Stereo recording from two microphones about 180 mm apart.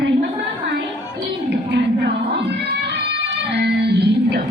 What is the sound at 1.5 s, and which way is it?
Music, 70° right (ahead or behind).